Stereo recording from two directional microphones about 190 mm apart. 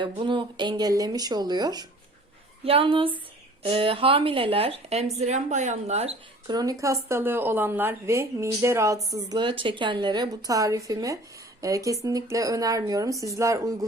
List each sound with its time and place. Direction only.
0.0 s a woman's voice: 25° right (ahead or behind)
6.5 s a woman's voice: 20° right (ahead or behind)